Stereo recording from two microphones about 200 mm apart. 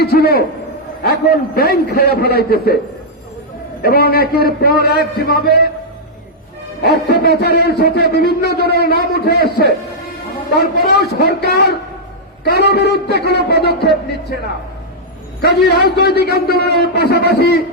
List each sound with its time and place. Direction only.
0.0 s a man's voice: 50° left (ahead or behind)
3.8 s a man's voice: 50° left (ahead or behind)
6.8 s a man's voice: 55° left (ahead or behind)
15.4 s a man's voice: 55° left (ahead or behind)